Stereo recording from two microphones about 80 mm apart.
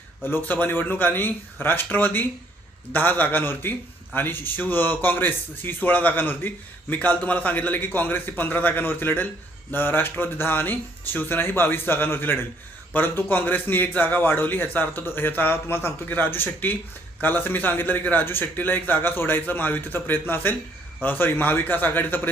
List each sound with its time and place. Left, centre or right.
0.3 s a man's voice: left